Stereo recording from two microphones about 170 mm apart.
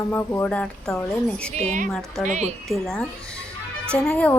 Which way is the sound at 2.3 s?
45° right (ahead or behind).